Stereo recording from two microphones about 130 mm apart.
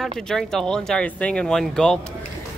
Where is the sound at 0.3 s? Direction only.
5° left (ahead or behind).